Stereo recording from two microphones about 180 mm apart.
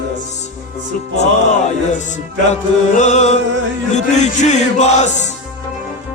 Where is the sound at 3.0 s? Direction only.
40° left (ahead or behind).